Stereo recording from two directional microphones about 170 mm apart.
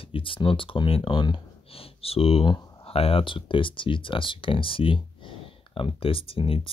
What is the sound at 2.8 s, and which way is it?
Speech, 35° left (ahead or behind).